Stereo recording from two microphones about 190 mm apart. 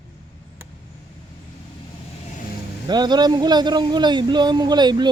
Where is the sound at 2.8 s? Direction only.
20° right (ahead or behind).